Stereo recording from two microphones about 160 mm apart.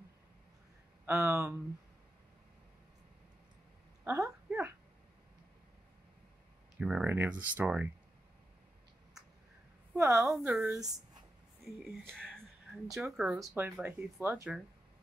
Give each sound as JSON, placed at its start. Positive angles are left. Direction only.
{"t": 1.0, "sound": "speech", "side_deg": -15}
{"t": 4.0, "sound": "a sound", "side_deg": -10}
{"t": 6.8, "sound": "speech", "side_deg": -5}
{"t": 9.9, "sound": "speech", "side_deg": -15}
{"t": 10.3, "sound": "a woman's voice", "side_deg": -5}
{"t": 12.1, "sound": "a woman's voice", "side_deg": 5}
{"t": 13.4, "sound": "speech", "side_deg": -20}